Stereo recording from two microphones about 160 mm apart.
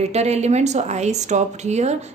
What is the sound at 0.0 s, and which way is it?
A woman's voice, 40° right (ahead or behind).